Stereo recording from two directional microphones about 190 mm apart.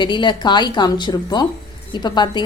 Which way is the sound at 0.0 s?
25° left (ahead or behind).